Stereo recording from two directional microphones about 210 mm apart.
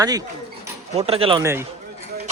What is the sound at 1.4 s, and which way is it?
Speech, 15° right (ahead or behind).